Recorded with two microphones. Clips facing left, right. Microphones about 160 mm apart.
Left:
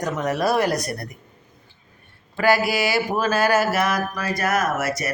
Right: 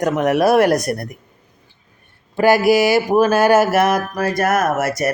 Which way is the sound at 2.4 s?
45° right (ahead or behind).